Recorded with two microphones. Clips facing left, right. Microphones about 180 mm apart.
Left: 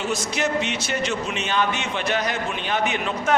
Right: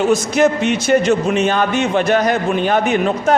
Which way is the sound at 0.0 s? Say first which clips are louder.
Right 11 dB; 45° right (ahead or behind).